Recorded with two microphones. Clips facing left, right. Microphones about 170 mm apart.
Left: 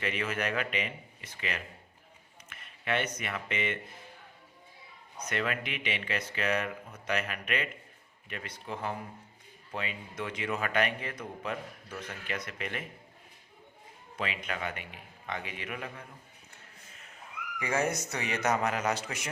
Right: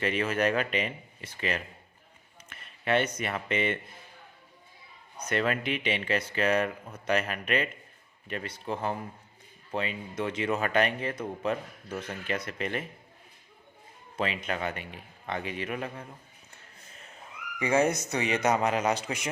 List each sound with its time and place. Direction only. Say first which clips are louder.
0.0 s a man's voice: right 6 dB; 35° right (ahead or behind)
5.3 s a man's voice: right 5 dB; 35° right (ahead or behind)
14.2 s a man's voice: right 5 dB; 35° right (ahead or behind)
17.6 s speech: right 6 dB; 20° right (ahead or behind)